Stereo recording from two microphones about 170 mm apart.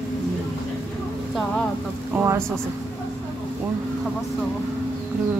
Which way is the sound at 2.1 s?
15° right (ahead or behind).